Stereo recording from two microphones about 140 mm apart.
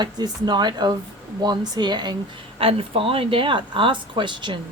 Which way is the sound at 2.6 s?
40° right (ahead or behind).